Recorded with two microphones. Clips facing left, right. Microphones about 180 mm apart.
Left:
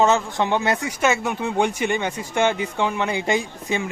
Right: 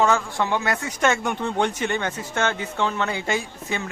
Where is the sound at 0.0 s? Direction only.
20° left (ahead or behind).